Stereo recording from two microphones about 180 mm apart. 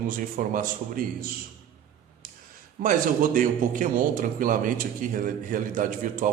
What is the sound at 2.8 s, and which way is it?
A man's voice, 55° right (ahead or behind).